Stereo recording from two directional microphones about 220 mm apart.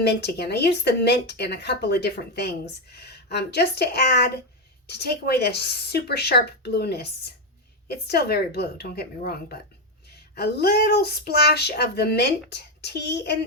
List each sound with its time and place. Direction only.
0.0 s speech: 50° left (ahead or behind)